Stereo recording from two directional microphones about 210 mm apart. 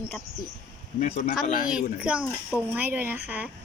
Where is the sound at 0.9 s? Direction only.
35° left (ahead or behind).